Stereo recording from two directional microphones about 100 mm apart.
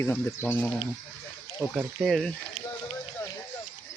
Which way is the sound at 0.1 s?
15° left (ahead or behind).